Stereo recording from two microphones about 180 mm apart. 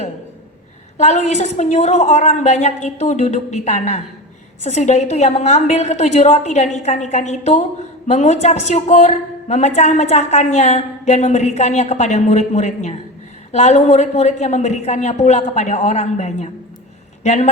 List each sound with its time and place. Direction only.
0.9 s a woman's voice: 40° left (ahead or behind)